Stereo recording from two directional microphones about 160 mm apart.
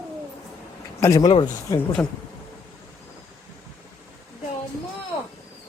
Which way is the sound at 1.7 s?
5° left (ahead or behind).